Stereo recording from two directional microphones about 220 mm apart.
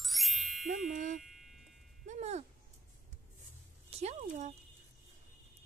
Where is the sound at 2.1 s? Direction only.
30° right (ahead or behind).